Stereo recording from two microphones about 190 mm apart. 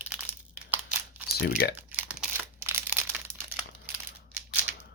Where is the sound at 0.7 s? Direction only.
10° right (ahead or behind).